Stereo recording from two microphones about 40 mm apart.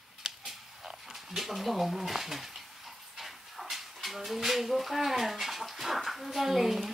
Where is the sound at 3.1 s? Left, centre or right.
Centre.